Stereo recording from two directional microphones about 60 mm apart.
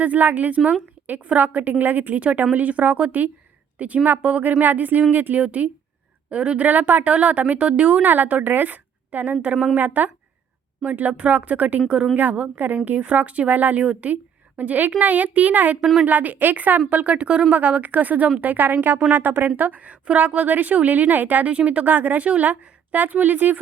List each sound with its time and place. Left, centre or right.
0.0 s a woman's voice: right